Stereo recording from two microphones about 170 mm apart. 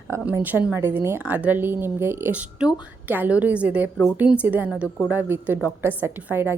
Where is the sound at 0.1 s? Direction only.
15° right (ahead or behind).